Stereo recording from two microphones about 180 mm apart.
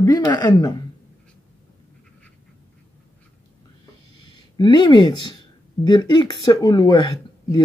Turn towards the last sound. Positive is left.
turn(degrees=20)  # may be behind; listen again after turning